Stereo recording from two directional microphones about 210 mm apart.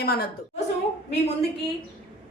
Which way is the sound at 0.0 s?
45° left (ahead or behind).